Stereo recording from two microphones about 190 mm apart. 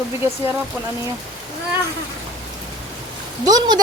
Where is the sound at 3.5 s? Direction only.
20° right (ahead or behind).